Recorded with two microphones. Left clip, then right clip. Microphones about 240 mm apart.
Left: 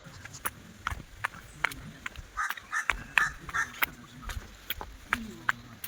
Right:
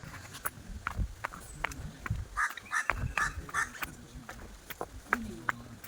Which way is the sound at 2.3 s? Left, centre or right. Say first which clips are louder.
Right 1 dB; right.